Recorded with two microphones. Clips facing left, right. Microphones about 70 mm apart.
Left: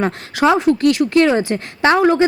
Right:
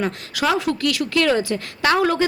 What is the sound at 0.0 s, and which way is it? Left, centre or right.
A woman's voice, left.